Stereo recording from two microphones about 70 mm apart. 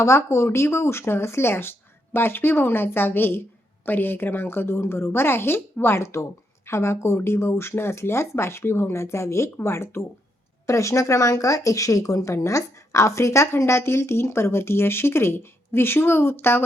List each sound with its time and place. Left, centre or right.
0.0 s speech: left